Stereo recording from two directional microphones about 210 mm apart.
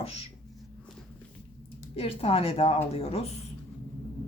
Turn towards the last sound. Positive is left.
turn(degrees=30)  # may be behind; listen again after turning